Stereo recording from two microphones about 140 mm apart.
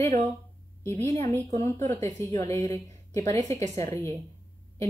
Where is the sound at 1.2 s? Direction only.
20° left (ahead or behind).